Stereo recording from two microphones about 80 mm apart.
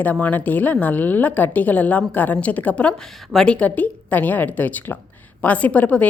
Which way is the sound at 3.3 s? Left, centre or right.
Centre.